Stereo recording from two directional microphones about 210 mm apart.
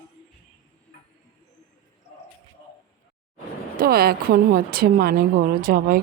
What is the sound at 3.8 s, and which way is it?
Speech, 45° right (ahead or behind).